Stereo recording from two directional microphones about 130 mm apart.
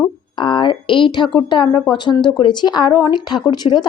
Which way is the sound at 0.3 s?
40° left (ahead or behind).